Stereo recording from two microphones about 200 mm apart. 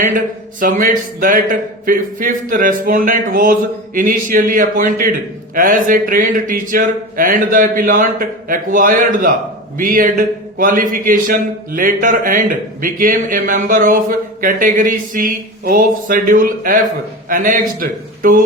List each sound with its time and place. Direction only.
0.6 s speech: 45° right (ahead or behind)